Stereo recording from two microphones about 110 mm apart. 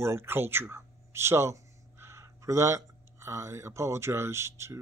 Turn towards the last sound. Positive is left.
turn(degrees=-25)  # may be behind; listen again after turning